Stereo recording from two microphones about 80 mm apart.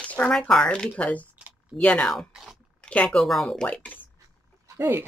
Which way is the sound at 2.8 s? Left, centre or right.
Centre.